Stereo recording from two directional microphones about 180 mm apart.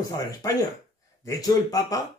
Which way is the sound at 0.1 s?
20° left (ahead or behind).